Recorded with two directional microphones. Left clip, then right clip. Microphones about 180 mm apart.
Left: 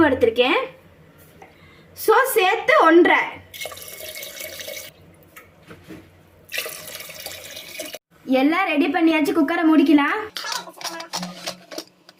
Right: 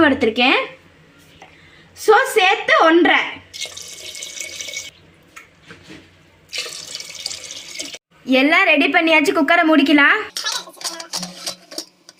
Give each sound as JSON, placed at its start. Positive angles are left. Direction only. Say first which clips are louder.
{"t": 0.0, "sound": "a woman's voice", "louder": "right 2 dB", "side_deg": -40}
{"t": 2.0, "sound": "a woman's voice", "louder": "right 3 dB", "side_deg": -35}
{"t": 8.3, "sound": "a woman's voice", "louder": "right 6 dB", "side_deg": -35}
{"t": 10.3, "sound": "music", "louder": "right 4 dB", "side_deg": 5}